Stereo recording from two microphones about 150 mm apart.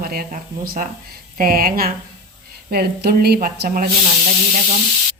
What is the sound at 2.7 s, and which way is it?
A woman's voice, 90° right.